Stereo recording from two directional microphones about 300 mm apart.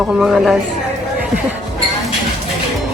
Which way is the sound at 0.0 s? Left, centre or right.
Centre.